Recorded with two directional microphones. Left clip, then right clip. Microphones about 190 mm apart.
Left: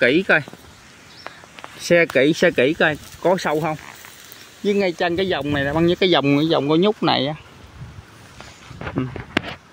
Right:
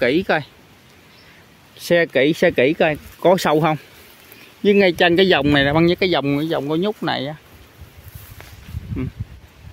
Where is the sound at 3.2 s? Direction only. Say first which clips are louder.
Right 4 dB; 45° right (ahead or behind).